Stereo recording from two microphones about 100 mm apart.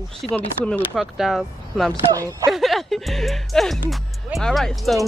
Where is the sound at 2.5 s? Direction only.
Centre (ahead or behind).